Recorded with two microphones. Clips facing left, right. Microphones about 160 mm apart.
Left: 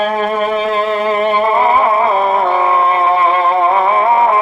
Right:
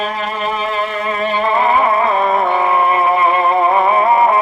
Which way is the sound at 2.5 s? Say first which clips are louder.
Left 1 dB; 25° left (ahead or behind).